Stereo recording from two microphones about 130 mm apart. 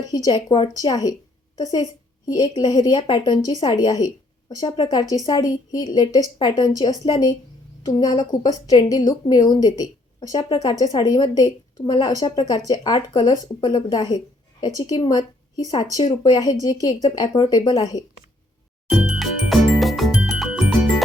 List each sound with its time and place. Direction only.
0.1 s a woman's voice: 30° left (ahead or behind)
18.9 s music: 5° right (ahead or behind)